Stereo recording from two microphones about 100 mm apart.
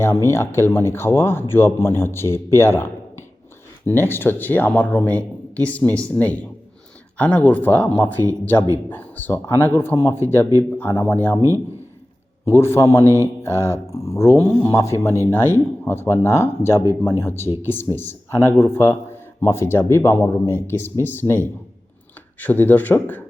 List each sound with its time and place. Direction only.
0.0 s a man's voice: 25° left (ahead or behind)
11.3 s a man's voice: 35° right (ahead or behind)
12.5 s a man's voice: 25° left (ahead or behind)
13.1 s mantra: 25° right (ahead or behind)
13.4 s a man's voice: 25° left (ahead or behind)